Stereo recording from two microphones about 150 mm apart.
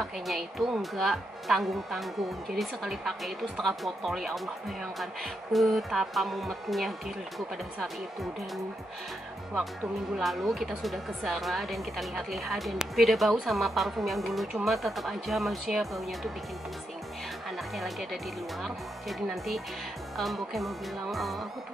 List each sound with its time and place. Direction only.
0.0 s speech: centre (ahead or behind)
10.1 s speech: centre (ahead or behind)
17.7 s speech: centre (ahead or behind)